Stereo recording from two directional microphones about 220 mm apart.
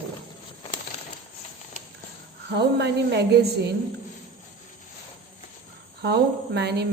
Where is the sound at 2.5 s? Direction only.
50° right (ahead or behind).